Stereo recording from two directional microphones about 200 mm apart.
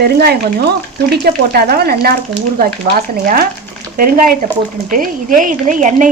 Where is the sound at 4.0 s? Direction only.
45° right (ahead or behind).